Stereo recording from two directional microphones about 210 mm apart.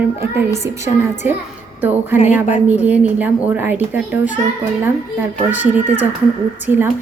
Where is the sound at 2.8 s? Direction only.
5° right (ahead or behind).